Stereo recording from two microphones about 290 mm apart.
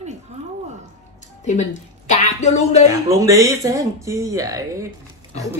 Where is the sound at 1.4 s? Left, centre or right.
Left.